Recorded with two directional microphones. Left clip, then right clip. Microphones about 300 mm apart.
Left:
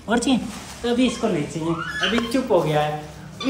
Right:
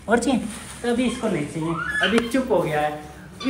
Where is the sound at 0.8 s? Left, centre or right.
Centre.